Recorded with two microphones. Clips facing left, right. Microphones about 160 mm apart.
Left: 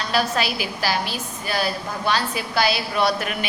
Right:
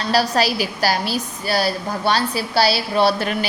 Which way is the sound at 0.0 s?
35° right (ahead or behind).